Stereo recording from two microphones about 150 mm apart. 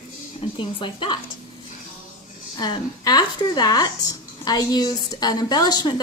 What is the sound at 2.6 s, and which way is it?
Speech, 30° left (ahead or behind).